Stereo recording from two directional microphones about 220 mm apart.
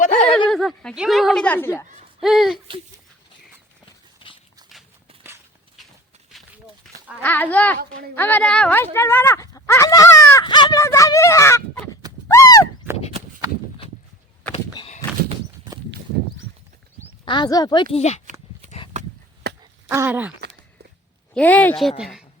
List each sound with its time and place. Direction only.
0.0 s a sound: 35° left (ahead or behind)
0.3 s speech: centre (ahead or behind)
2.2 s speech: centre (ahead or behind)
4.2 s dog: 25° left (ahead or behind)
6.8 s livestock: centre (ahead or behind)
7.2 s speech: 10° left (ahead or behind)
12.3 s a sound: 15° left (ahead or behind)
14.5 s a sound: 30° left (ahead or behind)
17.2 s speech: 20° left (ahead or behind)
17.9 s speech: 30° left (ahead or behind)
19.9 s speech: 10° right (ahead or behind)
21.3 s speech: 5° left (ahead or behind)